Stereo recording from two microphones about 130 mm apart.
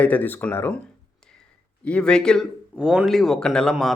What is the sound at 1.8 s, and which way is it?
Speech, 10° left (ahead or behind).